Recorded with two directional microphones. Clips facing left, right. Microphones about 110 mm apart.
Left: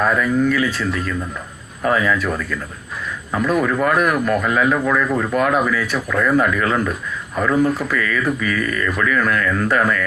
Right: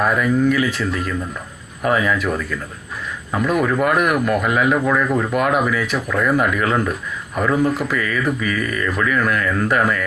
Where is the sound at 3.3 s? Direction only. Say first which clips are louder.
Even; 10° right (ahead or behind).